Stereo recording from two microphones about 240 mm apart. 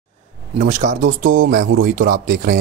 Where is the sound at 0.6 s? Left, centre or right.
Right.